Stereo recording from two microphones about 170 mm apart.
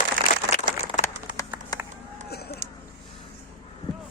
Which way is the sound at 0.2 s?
55° right (ahead or behind).